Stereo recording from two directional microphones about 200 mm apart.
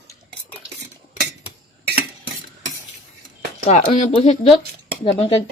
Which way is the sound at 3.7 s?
35° left (ahead or behind).